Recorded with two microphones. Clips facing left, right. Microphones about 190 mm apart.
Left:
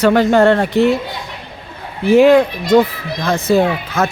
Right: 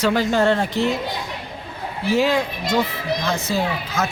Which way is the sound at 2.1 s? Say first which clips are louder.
Left 11 dB; 60° left (ahead or behind).